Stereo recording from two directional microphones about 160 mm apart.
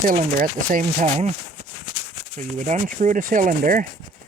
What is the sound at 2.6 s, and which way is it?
Speech, 50° right (ahead or behind).